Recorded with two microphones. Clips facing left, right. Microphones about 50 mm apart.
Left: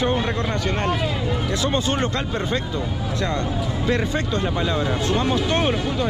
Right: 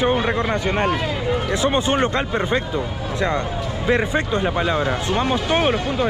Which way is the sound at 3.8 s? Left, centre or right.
Right.